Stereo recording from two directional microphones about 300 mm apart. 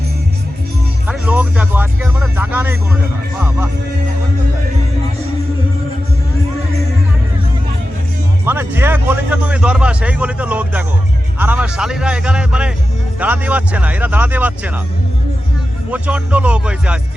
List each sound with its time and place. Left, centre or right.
1.0 s speech: centre
8.4 s speech: centre
15.9 s speech: centre